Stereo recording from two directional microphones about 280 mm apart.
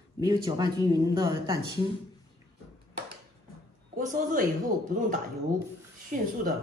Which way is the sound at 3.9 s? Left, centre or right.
Right.